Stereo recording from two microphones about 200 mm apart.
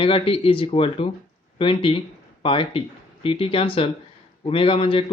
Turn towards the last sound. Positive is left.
turn(degrees=25)  # may be behind; listen again after turning